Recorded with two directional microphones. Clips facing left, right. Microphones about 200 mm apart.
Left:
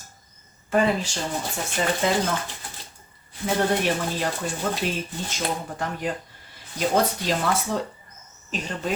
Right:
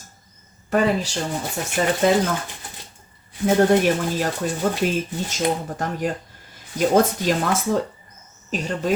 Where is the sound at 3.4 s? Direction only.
45° right (ahead or behind).